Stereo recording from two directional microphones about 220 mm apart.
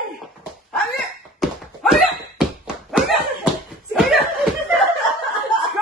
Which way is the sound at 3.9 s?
Centre (ahead or behind).